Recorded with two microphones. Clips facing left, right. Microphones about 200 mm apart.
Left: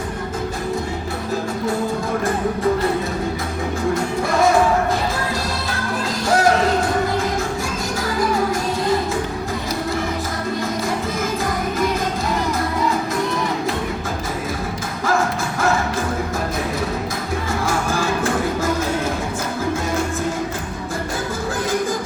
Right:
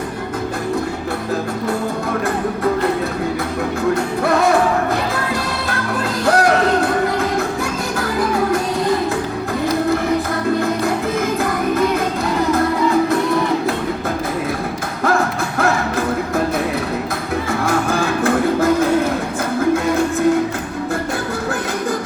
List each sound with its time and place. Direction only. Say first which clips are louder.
6.2 s music: right 2 dB; 60° right (ahead or behind)
17.7 s music: right 3 dB; 60° right (ahead or behind)